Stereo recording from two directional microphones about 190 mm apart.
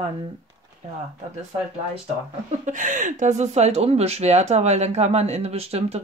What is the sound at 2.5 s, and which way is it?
Speech, 40° right (ahead or behind).